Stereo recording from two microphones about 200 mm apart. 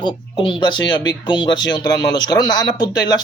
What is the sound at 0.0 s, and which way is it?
Speech, 25° left (ahead or behind).